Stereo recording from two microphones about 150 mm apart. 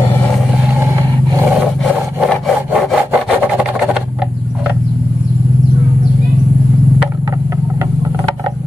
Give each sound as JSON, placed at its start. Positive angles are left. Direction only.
{"t": 0.7, "sound": "vehicle", "side_deg": -20}
{"t": 2.2, "sound": "rub", "side_deg": 0}